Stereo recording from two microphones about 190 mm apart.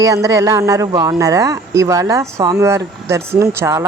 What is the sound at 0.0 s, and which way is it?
Speech, 15° right (ahead or behind).